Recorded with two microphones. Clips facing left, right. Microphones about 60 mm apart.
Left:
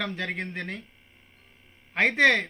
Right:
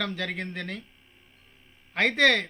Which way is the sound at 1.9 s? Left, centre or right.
Centre.